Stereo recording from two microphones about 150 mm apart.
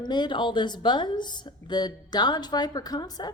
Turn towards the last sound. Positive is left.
turn(degrees=25)  # may be behind; listen again after turning